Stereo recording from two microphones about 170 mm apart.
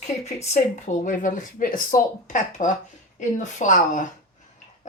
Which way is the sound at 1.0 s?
50° left (ahead or behind).